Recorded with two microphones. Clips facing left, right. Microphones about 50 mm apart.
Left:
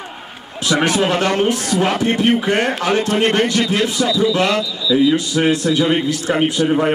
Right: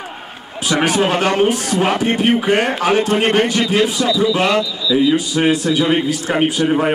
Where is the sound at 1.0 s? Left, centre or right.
Right.